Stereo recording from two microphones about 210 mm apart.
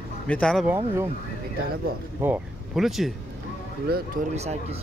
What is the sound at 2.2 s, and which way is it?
Speech, 5° right (ahead or behind).